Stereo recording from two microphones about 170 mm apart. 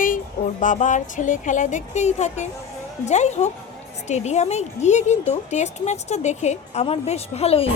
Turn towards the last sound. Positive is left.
turn(degrees=35)  # may be behind; listen again after turning